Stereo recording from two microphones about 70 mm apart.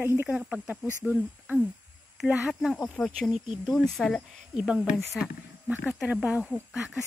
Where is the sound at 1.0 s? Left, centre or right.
Right.